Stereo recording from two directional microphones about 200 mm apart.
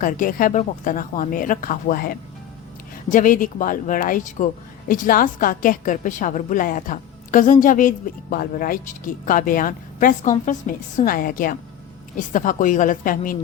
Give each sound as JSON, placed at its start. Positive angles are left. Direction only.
{"t": 0.0, "sound": "a woman's voice", "side_deg": 45}